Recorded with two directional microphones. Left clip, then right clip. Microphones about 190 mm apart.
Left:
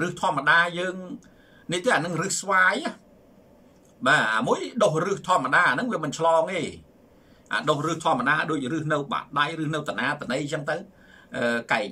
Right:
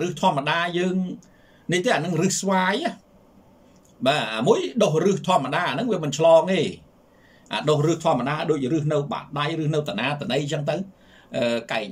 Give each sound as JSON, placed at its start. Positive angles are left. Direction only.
{"t": 0.0, "sound": "a man's voice", "side_deg": -15}
{"t": 4.0, "sound": "a man's voice", "side_deg": -15}